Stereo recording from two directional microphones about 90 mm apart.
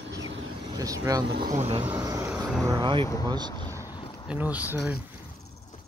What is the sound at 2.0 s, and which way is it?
Vehicle, 35° right (ahead or behind).